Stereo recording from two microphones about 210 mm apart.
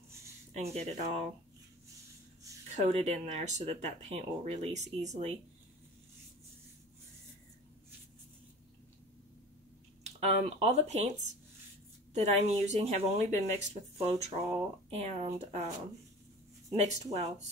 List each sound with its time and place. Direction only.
0.5 s speech: 30° right (ahead or behind)
2.8 s speech: 30° right (ahead or behind)
10.0 s speech: 30° right (ahead or behind)
12.1 s speech: 30° right (ahead or behind)
16.7 s speech: 30° right (ahead or behind)